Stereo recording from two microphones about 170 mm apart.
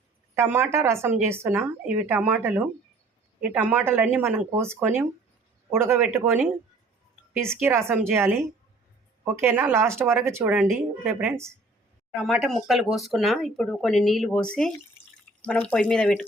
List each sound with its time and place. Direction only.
0.3 s speech: 15° right (ahead or behind)
12.1 s speech: centre (ahead or behind)